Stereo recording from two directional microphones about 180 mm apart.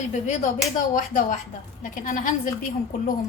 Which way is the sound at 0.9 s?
45° left (ahead or behind).